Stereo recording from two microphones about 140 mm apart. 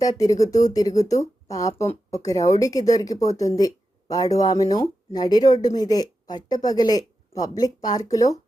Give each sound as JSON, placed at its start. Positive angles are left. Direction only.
{"t": 0.0, "sound": "speech", "side_deg": 25}